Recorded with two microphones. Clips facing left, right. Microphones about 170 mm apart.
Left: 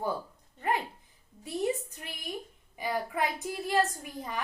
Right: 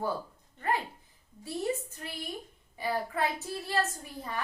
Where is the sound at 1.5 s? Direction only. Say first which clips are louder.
Left 1 dB; 20° left (ahead or behind).